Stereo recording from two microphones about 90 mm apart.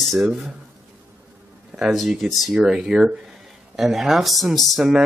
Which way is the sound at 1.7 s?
5° right (ahead or behind).